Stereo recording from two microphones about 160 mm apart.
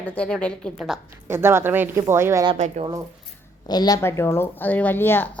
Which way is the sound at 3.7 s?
25° left (ahead or behind).